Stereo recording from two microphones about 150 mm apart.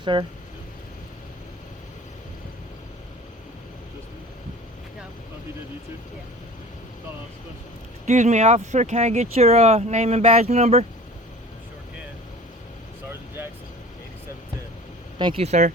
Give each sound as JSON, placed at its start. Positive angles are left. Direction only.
{"t": 0.0, "sound": "speech", "side_deg": -30}
{"t": 8.0, "sound": "speech", "side_deg": -50}
{"t": 15.2, "sound": "speech", "side_deg": -40}